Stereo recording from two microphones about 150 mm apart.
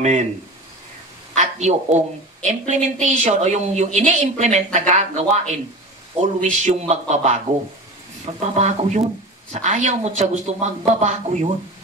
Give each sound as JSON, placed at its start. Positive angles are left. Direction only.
{"t": 0.0, "sound": "a woman's voice", "side_deg": -50}
{"t": 1.3, "sound": "a woman's voice", "side_deg": -50}
{"t": 6.6, "sound": "a woman's voice", "side_deg": -50}